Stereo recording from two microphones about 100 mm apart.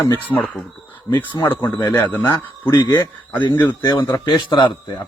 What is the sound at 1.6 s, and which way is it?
Speech, 45° left (ahead or behind).